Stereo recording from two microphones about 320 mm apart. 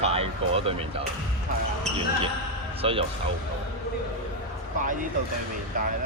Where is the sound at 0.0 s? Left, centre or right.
Centre.